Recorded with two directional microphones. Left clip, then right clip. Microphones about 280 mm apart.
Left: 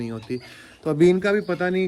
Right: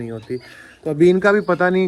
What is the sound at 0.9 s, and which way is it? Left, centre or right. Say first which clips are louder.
Speech: right 3 dB; left.